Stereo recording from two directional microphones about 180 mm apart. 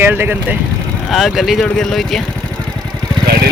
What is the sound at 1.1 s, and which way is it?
Speech, centre (ahead or behind).